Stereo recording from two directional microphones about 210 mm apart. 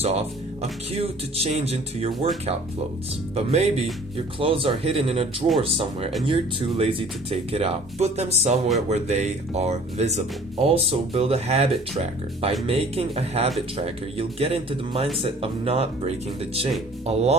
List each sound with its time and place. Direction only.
0.0 s speech: 30° right (ahead or behind)
3.3 s speech: 30° right (ahead or behind)